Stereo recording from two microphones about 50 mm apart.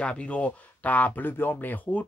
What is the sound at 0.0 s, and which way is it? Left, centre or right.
Speech, left.